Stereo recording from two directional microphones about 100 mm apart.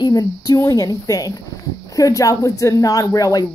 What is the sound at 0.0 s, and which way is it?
Speech, 40° left (ahead or behind).